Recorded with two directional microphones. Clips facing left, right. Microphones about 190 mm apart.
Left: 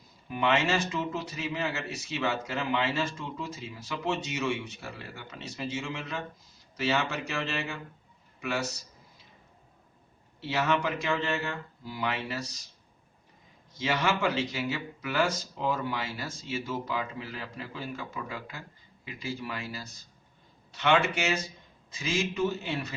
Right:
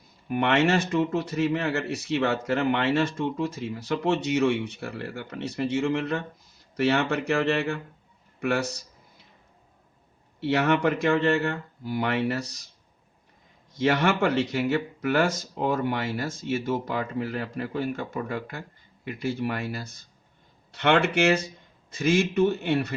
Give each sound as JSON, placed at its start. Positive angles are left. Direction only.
{"t": 0.3, "sound": "a man's voice", "side_deg": -60}
{"t": 10.4, "sound": "speech", "side_deg": -60}
{"t": 13.7, "sound": "speech", "side_deg": -60}